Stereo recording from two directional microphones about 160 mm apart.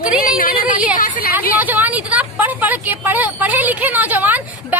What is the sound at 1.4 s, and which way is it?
Vehicle, 10° right (ahead or behind).